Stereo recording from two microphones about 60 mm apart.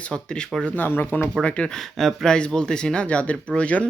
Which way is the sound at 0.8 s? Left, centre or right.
Left.